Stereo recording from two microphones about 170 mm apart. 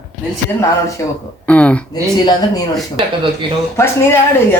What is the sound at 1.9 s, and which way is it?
Speech, 25° left (ahead or behind).